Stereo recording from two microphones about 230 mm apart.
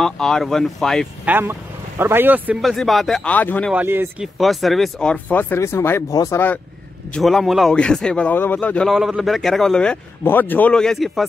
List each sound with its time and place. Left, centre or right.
0.0 s a man's voice: centre
3.7 s a man's voice: centre